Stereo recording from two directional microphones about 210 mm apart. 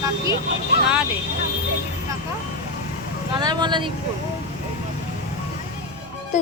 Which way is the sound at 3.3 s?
20° right (ahead or behind).